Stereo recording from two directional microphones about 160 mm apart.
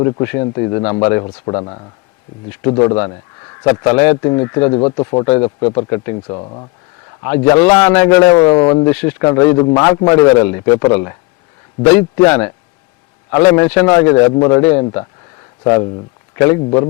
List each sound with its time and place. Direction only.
0.0 s a man's voice: 15° left (ahead or behind); by 2.9 s 35° left (ahead or behind)
3.6 s a man's voice: 15° left (ahead or behind)
5.2 s a man's voice: 15° left (ahead or behind)
5.5 s speech: 30° left (ahead or behind)
5.9 s a man's voice: 20° left (ahead or behind)
6.3 s speech: 30° left (ahead or behind)
7.3 s a man's voice: 20° left (ahead or behind)
8.4 s speech: 30° left (ahead or behind)
8.9 s a man's voice: 10° left (ahead or behind)
15.6 s a man's voice: 25° left (ahead or behind)
16.6 s speech: 35° left (ahead or behind)